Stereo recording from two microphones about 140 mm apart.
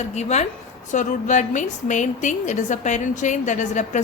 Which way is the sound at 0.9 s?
65° left (ahead or behind).